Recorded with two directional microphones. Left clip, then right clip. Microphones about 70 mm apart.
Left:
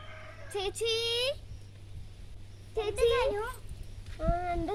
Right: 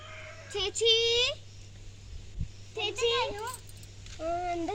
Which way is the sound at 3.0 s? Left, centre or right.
Left.